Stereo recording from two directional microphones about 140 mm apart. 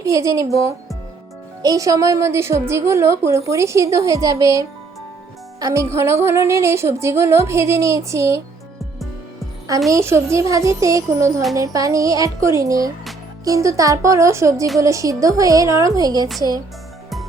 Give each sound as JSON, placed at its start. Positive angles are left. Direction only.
{"t": 0.0, "sound": "a woman's voice", "side_deg": -20}
{"t": 1.6, "sound": "a woman's voice", "side_deg": -25}
{"t": 9.9, "sound": "a woman's voice", "side_deg": -20}